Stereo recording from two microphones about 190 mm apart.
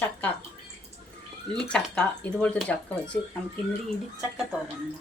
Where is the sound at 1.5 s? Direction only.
5° left (ahead or behind).